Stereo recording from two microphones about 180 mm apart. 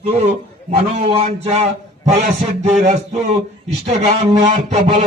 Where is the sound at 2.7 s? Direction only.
40° right (ahead or behind).